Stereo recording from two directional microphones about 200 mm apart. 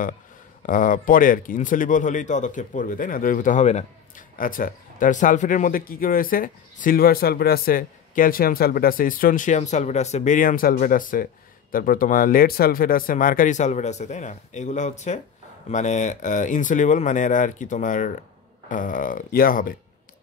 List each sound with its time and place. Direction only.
0.7 s speech: 40° left (ahead or behind)